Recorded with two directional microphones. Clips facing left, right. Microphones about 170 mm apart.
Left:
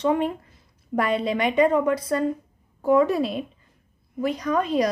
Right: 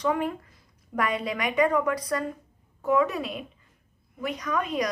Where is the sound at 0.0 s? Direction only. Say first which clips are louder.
Left 4 dB; 25° left (ahead or behind).